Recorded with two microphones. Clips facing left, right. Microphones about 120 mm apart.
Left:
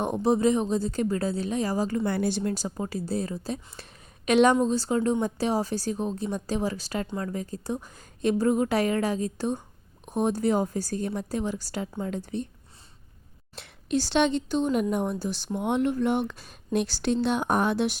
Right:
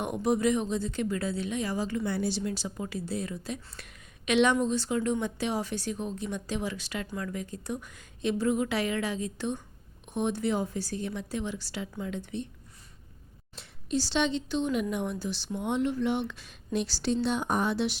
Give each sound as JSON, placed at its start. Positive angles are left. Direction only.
{"t": 0.0, "sound": "a woman's voice", "side_deg": 30}
{"t": 2.1, "sound": "a woman's voice", "side_deg": 50}
{"t": 13.6, "sound": "speech", "side_deg": 60}